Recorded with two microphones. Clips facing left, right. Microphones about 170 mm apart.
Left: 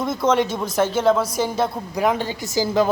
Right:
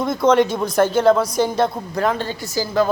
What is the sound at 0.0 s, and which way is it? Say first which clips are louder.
A woman's voice: right 4 dB; centre (ahead or behind).